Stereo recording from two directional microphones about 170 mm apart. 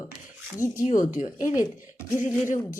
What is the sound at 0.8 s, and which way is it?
Speech, 50° left (ahead or behind).